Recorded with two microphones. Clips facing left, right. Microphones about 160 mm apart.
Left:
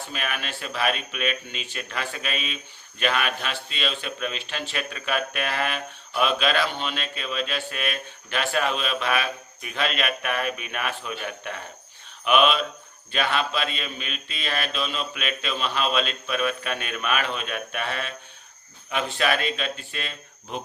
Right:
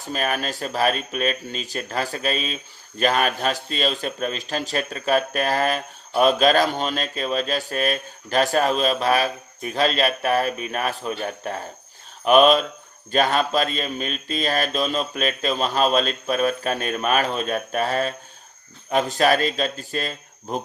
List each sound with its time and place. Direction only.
0.0 s speech: 40° right (ahead or behind)